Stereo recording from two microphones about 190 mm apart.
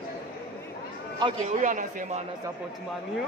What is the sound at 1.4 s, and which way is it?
Speech, 40° right (ahead or behind).